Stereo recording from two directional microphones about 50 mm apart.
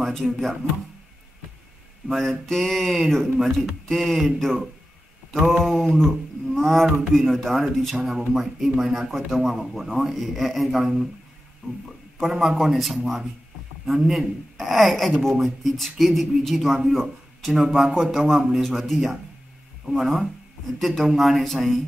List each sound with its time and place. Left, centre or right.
0.0 s speech: centre
2.0 s a man's voice: centre
5.6 s a man's voice: centre
11.6 s speech: centre
12.2 s a man's voice: centre
17.4 s speech: centre
18.6 s a man's voice: centre